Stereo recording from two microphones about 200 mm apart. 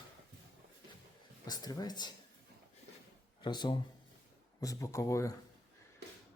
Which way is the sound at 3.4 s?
20° left (ahead or behind).